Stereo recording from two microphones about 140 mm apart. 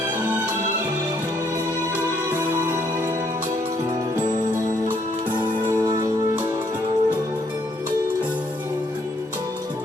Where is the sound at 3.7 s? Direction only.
25° right (ahead or behind).